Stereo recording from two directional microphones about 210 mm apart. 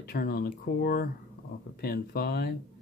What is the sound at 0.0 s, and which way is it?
Speech, 45° left (ahead or behind).